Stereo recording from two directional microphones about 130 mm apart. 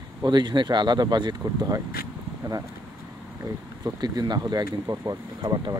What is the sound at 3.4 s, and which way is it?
Speech, 30° right (ahead or behind).